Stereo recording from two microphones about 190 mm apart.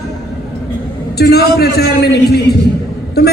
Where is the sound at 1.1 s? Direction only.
55° left (ahead or behind).